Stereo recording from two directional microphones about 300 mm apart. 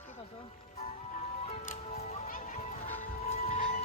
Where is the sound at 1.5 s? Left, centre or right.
Left.